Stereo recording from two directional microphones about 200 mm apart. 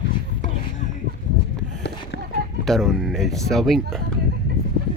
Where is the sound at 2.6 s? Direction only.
Centre (ahead or behind).